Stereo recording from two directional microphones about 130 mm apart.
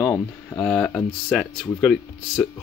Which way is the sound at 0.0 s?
15° left (ahead or behind).